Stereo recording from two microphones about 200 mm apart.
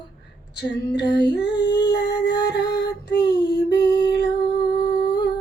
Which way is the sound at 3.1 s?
55° left (ahead or behind).